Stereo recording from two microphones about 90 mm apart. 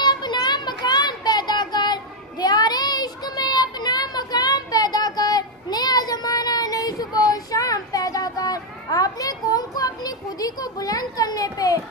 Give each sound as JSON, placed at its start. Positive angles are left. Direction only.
{"t": 0.0, "sound": "child singing", "side_deg": 55}